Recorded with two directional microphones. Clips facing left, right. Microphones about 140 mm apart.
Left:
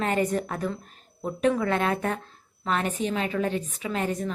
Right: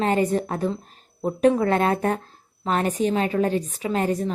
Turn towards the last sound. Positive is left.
turn(degrees=-35)  # may be behind; listen again after turning